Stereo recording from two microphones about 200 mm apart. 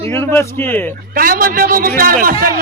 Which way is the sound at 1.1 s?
45° right (ahead or behind).